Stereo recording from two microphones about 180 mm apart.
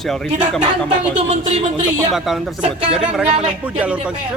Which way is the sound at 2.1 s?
Centre (ahead or behind).